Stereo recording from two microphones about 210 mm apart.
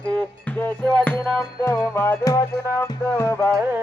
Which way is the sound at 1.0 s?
10° left (ahead or behind).